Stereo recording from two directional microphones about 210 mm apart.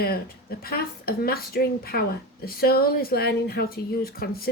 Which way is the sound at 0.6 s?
45° left (ahead or behind).